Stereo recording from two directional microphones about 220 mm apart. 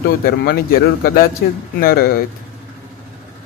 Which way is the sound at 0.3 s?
40° left (ahead or behind).